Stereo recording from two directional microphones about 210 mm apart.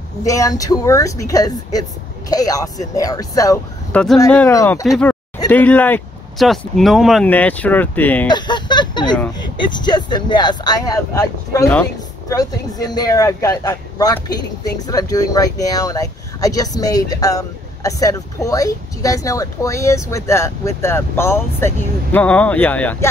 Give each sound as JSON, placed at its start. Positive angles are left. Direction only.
{"t": 0.2, "sound": "speech", "side_deg": 15}
{"t": 4.8, "sound": "speech", "side_deg": 0}
{"t": 8.3, "sound": "a sound", "side_deg": 20}
{"t": 9.4, "sound": "speech", "side_deg": 20}